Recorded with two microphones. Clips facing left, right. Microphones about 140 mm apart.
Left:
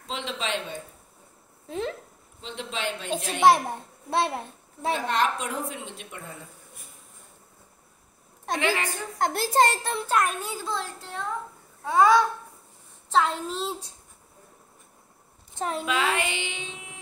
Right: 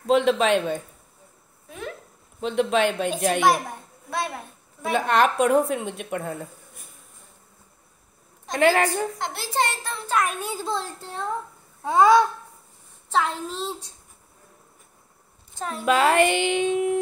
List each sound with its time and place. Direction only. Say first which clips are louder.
0.0 s a woman's voice: right 13 dB; 55° right (ahead or behind)
1.7 s speech: left 5 dB; 25° left (ahead or behind)
2.4 s a woman's voice: right 11 dB; 55° right (ahead or behind)
3.4 s a child's voice: left 2 dB; 30° left (ahead or behind)
4.9 s a woman's voice: right 7 dB; 55° right (ahead or behind)
8.5 s a woman's voice: right 8 dB; 50° right (ahead or behind)
9.2 s a child's voice: left 10 dB; 45° left (ahead or behind)
10.0 s a woman's voice: right 1 dB; centre (ahead or behind)
10.4 s a child's voice: right 3 dB; 25° right (ahead or behind)
11.8 s babbling: right 3 dB; 20° right (ahead or behind)
13.1 s a woman's voice: left 1 dB; centre (ahead or behind)
15.5 s a woman's voice: left 2 dB; 20° left (ahead or behind)
15.8 s a woman's voice: right 10 dB; 50° right (ahead or behind)